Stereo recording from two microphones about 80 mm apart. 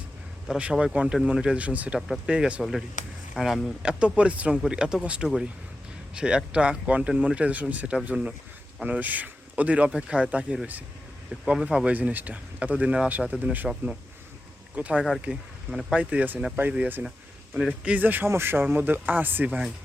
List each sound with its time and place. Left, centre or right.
0.6 s speech: centre
2.0 s speech: centre
2.3 s speech: centre
3.8 s speech: centre
11.9 s speech: centre
14.8 s speech: centre